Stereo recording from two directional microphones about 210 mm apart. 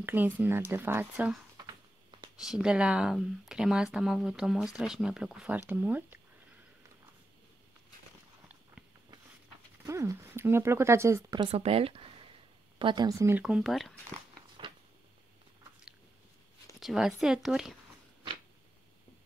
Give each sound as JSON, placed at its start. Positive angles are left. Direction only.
{"t": 0.0, "sound": "speech", "side_deg": -10}
{"t": 1.7, "sound": "a sound", "side_deg": -20}
{"t": 2.3, "sound": "speech", "side_deg": -5}
{"t": 9.8, "sound": "speech", "side_deg": -15}
{"t": 16.8, "sound": "speech", "side_deg": 0}